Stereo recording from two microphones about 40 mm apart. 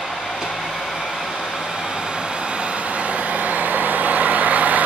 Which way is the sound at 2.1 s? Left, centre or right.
Right.